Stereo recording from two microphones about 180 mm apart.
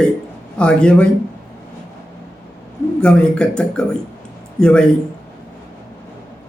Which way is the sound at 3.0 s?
5° left (ahead or behind).